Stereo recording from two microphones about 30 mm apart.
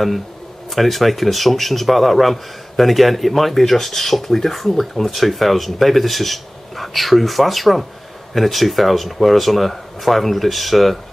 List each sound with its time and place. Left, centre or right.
0.7 s speech: centre